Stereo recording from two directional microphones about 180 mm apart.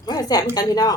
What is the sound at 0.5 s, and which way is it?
Speech, 20° left (ahead or behind).